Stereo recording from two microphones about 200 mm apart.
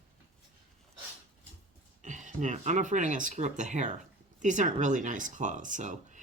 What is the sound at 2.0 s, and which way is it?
Speech, 40° right (ahead or behind).